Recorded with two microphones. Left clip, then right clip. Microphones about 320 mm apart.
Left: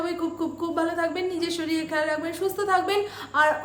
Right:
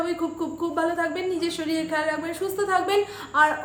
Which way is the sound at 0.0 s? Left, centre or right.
Centre.